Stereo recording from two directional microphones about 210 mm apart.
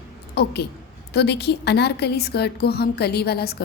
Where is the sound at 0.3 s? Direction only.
50° left (ahead or behind).